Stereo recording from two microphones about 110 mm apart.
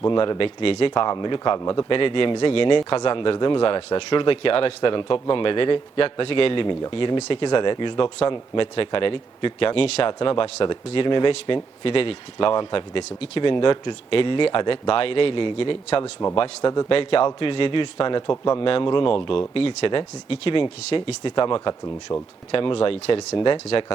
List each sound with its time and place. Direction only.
0.1 s a man's voice: 45° left (ahead or behind)
1.9 s a man's voice: 50° left (ahead or behind)
13.1 s speech: 70° left (ahead or behind)
13.4 s a man's voice: 50° left (ahead or behind)
22.1 s speech: 25° left (ahead or behind)
22.5 s a man's voice: 55° left (ahead or behind)